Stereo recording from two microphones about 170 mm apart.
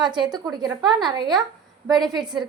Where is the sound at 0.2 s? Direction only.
25° right (ahead or behind).